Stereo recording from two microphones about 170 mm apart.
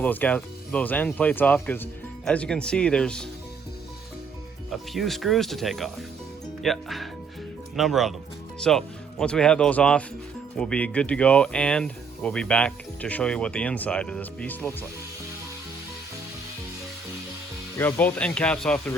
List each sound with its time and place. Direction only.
0.0 s speech: 10° left (ahead or behind)
4.7 s speech: centre (ahead or behind)
17.7 s speech: 10° left (ahead or behind)